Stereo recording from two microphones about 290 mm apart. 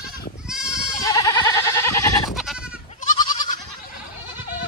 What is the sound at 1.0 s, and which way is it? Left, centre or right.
Goat, centre.